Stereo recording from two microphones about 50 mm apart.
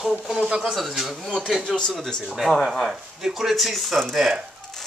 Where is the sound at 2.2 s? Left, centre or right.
Centre.